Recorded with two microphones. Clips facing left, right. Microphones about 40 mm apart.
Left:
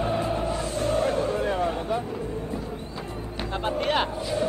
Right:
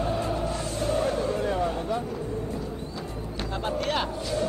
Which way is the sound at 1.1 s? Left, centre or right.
Left.